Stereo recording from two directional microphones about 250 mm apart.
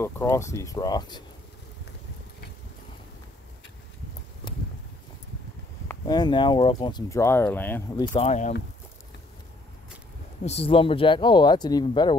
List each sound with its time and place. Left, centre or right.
0.0 s speech: centre
5.9 s speech: centre
8.1 s speech: left
10.4 s speech: left